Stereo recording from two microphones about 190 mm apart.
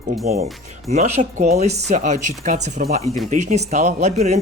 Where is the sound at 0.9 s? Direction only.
35° right (ahead or behind).